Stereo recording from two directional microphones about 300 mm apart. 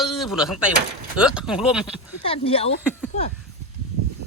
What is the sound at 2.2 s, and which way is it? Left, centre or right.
Speech, centre.